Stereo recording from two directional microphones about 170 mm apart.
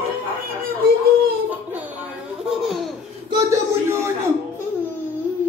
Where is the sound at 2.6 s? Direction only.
Centre (ahead or behind).